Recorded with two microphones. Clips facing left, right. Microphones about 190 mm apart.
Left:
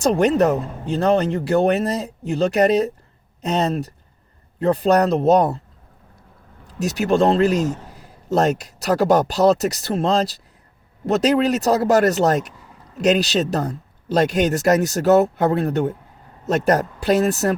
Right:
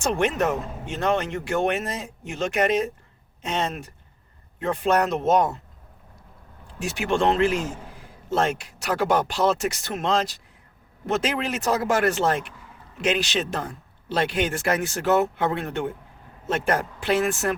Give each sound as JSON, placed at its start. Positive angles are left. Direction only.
{"t": 0.0, "sound": "a man's voice", "side_deg": 35}
{"t": 6.7, "sound": "a man's voice", "side_deg": 40}